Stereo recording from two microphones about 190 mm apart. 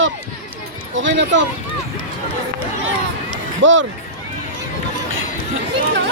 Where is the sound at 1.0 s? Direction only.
75° right (ahead or behind).